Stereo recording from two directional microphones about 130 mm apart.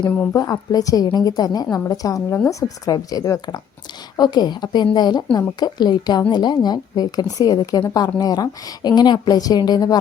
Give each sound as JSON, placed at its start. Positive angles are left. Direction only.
{"t": 0.3, "sound": "a woman's voice", "side_deg": 30}